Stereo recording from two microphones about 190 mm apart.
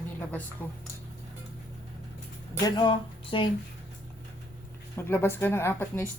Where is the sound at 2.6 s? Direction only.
25° left (ahead or behind).